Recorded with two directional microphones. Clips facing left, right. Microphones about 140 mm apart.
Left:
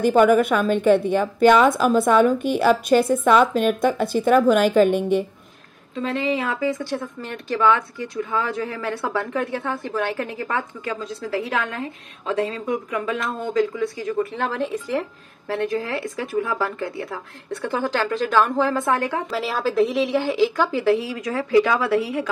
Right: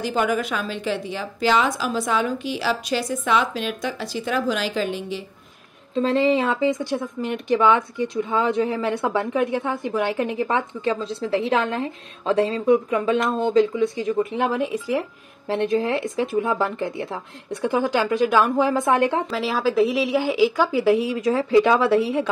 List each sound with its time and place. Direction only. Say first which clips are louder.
0.0 s a woman's voice: left 7 dB; 50° left (ahead or behind)
5.9 s a woman's voice: right 5 dB; 30° right (ahead or behind); by 15.0 s 10° right (ahead or behind)
15.4 s a woman's voice: right 3 dB; 20° right (ahead or behind)
19.3 s speech: right 1 dB; centre (ahead or behind); by 22.3 s 25° right (ahead or behind)